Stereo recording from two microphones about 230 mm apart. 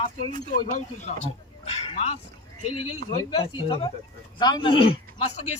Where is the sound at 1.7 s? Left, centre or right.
Left.